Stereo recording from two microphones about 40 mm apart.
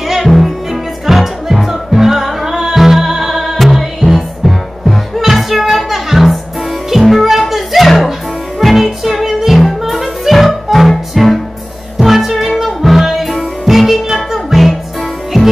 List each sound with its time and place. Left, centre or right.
0.0 s music: centre
3.5 s music: centre